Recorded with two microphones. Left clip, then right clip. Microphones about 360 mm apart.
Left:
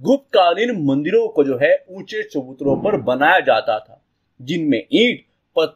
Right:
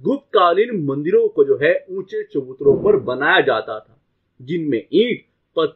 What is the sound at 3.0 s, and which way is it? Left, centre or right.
Speech, left.